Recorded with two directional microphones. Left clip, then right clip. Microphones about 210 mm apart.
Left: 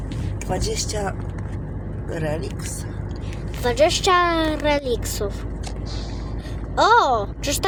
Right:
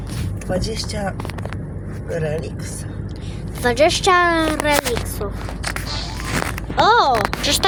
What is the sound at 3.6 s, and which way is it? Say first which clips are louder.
Speech: right 3 dB; 15° right (ahead or behind).